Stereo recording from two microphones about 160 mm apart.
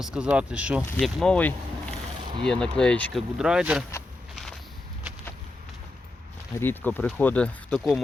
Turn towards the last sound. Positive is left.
turn(degrees=0)  # may be behind; listen again after turning